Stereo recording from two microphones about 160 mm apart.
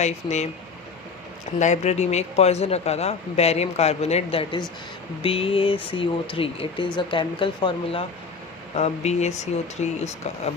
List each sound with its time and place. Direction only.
0.0 s speech: 45° left (ahead or behind)
1.5 s speech: 50° left (ahead or behind); by 8.0 s 30° left (ahead or behind)
8.7 s speech: 45° left (ahead or behind)